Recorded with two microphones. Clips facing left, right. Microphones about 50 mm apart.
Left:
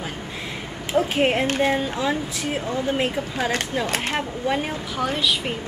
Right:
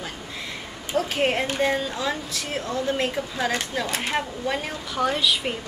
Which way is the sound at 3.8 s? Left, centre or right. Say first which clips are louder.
Left 3 dB; left.